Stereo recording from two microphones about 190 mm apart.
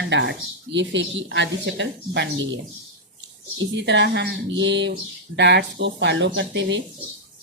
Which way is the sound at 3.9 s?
65° right (ahead or behind).